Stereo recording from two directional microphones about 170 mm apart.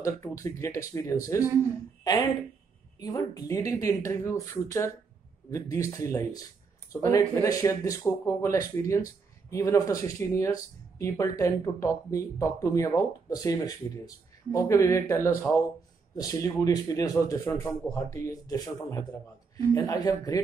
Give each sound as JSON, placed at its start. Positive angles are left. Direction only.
{"t": 0.0, "sound": "speech", "side_deg": 20}
{"t": 3.0, "sound": "speech", "side_deg": 25}